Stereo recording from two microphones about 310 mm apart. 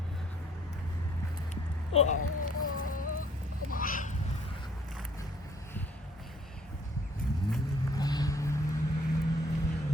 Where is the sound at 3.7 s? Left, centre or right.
Left.